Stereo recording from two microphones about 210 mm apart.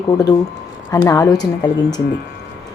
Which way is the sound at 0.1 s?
15° left (ahead or behind).